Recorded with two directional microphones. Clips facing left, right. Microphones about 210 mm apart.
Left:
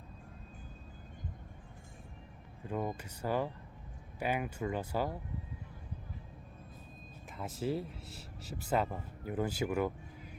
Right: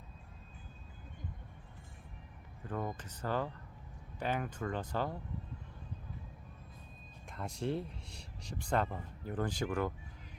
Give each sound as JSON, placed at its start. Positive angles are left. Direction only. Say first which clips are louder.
{"t": 2.6, "sound": "speech", "louder": "left 2 dB", "side_deg": 15}
{"t": 7.3, "sound": "speech", "louder": "left 1 dB", "side_deg": 5}